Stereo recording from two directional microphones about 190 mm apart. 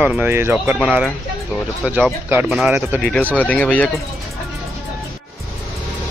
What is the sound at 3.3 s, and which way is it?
Speech, 10° left (ahead or behind).